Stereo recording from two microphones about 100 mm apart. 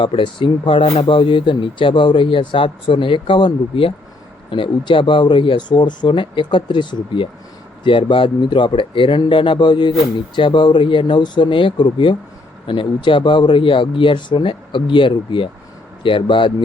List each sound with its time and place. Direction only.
0.0 s speech: 60° left (ahead or behind)